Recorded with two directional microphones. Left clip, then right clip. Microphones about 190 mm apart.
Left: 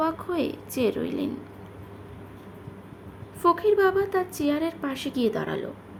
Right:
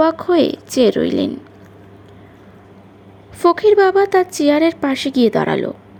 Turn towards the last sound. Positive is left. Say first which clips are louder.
# right 12 dB
turn(degrees=-35)  # may be behind; listen again after turning